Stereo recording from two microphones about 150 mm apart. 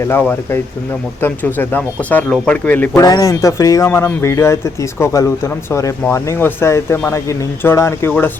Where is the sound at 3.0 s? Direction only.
25° left (ahead or behind).